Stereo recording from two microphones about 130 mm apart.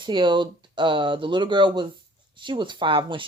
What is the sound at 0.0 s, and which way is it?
Speech, 35° right (ahead or behind).